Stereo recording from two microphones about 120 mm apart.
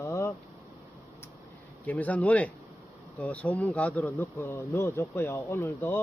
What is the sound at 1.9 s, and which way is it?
Speech, 10° left (ahead or behind).